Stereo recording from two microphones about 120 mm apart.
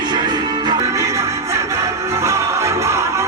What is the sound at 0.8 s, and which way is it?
Music, 25° right (ahead or behind).